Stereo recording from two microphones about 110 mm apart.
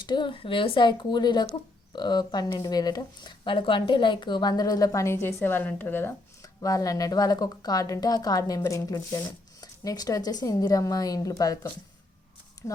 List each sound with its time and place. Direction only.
0.0 s speech: 45° left (ahead or behind); by 6.1 s 20° left (ahead or behind)
6.4 s speech: 30° left (ahead or behind)
12.6 s speech: 25° left (ahead or behind)